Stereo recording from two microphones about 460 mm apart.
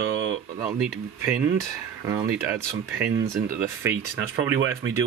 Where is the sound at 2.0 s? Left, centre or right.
Centre.